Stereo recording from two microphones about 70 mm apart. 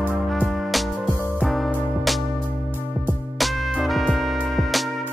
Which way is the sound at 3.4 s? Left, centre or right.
Centre.